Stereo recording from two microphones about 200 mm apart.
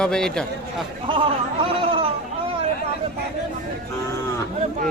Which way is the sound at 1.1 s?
25° right (ahead or behind).